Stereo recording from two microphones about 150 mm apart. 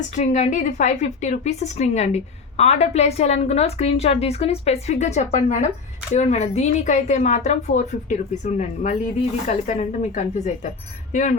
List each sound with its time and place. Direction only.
0.1 s a woman's voice: 55° left (ahead or behind)